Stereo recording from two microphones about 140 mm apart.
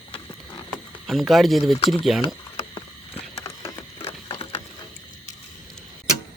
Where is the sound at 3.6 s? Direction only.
45° left (ahead or behind).